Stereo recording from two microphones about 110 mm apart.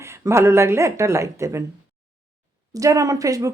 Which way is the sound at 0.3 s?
25° right (ahead or behind).